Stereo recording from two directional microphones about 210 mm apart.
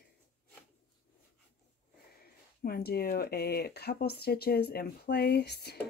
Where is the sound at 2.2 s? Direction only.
45° left (ahead or behind).